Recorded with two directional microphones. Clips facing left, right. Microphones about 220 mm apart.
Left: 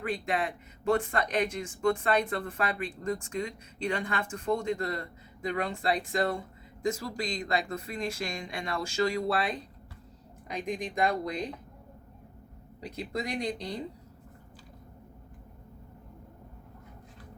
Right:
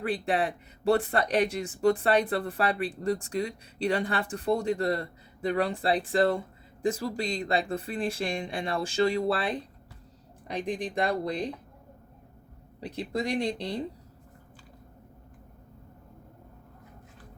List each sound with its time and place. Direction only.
0.0 s speech: 35° right (ahead or behind)
12.8 s speech: 30° right (ahead or behind)